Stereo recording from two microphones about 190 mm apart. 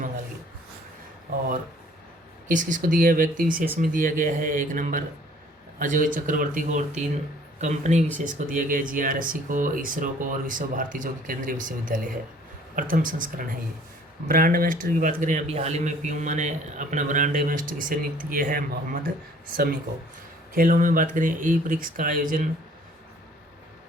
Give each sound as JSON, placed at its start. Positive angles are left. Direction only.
{"t": 2.5, "sound": "speech", "side_deg": -40}